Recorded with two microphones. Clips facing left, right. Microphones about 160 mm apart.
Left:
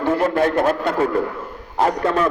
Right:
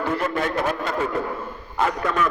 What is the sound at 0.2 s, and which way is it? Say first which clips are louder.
Speech: left 6 dB; 40° left (ahead or behind).